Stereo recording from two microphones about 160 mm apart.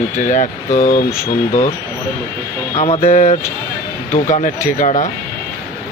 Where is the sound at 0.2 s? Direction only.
50° left (ahead or behind).